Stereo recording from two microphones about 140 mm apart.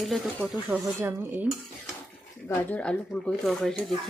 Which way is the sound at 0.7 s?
15° right (ahead or behind).